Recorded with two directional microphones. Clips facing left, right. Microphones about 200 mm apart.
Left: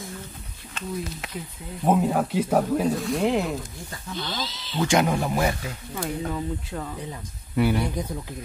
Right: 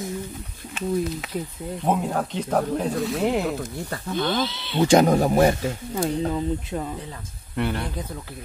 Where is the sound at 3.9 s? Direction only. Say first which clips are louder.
Right 8 dB; 55° right (ahead or behind).